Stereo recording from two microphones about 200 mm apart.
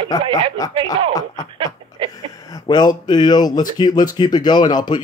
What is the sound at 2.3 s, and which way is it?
Speech, 20° left (ahead or behind).